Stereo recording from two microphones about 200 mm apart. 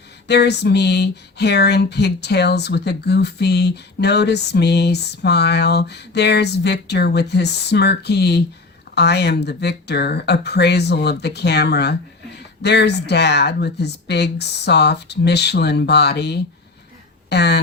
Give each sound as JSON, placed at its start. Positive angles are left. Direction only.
{"t": 0.3, "sound": "speech", "side_deg": 55}